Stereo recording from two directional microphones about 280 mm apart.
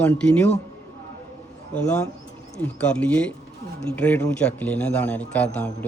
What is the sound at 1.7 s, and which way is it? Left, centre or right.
A man's voice, centre.